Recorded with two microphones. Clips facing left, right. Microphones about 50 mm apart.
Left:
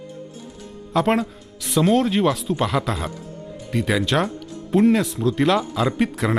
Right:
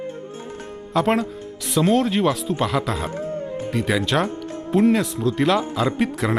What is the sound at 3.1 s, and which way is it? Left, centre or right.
Music, right.